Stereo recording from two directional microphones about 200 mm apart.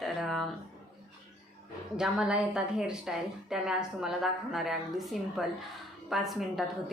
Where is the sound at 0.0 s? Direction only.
Centre (ahead or behind).